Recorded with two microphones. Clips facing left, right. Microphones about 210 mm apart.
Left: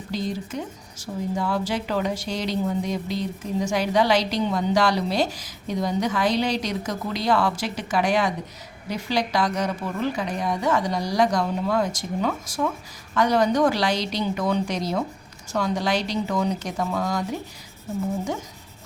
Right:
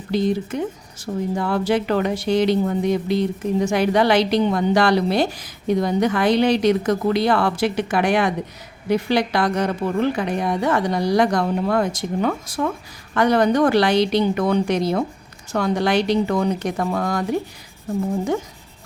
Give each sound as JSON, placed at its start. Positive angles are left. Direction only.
{"t": 0.1, "sound": "speech", "side_deg": -60}